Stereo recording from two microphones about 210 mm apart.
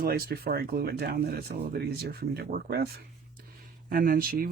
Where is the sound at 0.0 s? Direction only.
45° right (ahead or behind).